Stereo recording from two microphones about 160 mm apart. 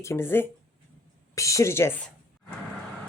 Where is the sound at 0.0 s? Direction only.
15° left (ahead or behind).